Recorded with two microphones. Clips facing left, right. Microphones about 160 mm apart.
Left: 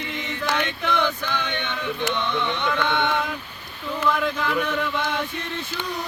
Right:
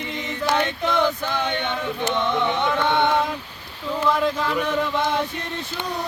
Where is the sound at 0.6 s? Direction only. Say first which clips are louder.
Right 3 dB; 40° right (ahead or behind).